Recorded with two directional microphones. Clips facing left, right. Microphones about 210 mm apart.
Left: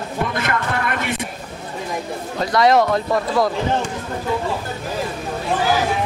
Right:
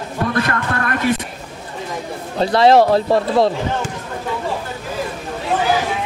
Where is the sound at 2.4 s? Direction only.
30° right (ahead or behind).